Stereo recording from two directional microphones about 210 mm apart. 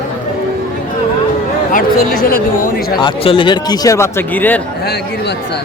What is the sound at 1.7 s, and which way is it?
Speech, 45° left (ahead or behind).